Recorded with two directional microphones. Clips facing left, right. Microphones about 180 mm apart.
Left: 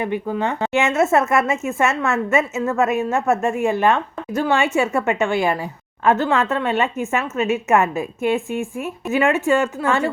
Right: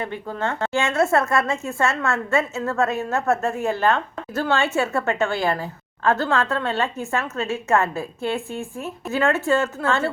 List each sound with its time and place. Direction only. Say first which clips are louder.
0.0 s a woman's voice: left 5 dB; 15° left (ahead or behind)